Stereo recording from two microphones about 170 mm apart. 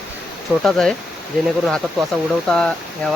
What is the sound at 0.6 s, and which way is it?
Speech, 5° left (ahead or behind).